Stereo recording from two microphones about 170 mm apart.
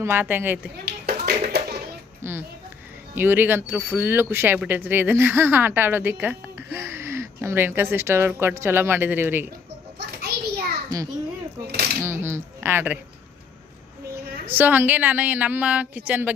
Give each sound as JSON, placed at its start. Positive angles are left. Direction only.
{"t": 0.0, "sound": "speech", "side_deg": -10}
{"t": 1.0, "sound": "a sound", "side_deg": -70}
{"t": 2.2, "sound": "speech", "side_deg": -15}
{"t": 10.2, "sound": "a sound", "side_deg": -65}
{"t": 10.8, "sound": "a child's voice", "side_deg": -20}
{"t": 14.4, "sound": "speech", "side_deg": -10}